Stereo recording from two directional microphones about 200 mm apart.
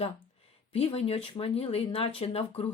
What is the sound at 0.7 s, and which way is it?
Speech, 30° left (ahead or behind).